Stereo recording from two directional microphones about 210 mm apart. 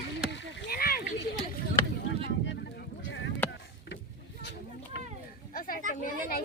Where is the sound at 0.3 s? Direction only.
50° left (ahead or behind).